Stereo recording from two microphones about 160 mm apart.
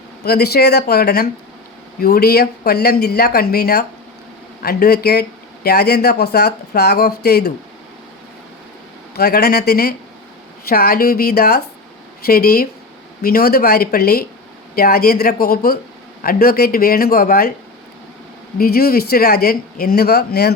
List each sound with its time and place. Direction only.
0.3 s speech: 85° left
9.1 s speech: 80° left
18.5 s speech: 70° left (ahead or behind); by 20.5 s 90° left